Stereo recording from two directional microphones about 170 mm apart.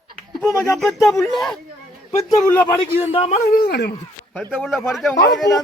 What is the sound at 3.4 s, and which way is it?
Speech, 60° left (ahead or behind).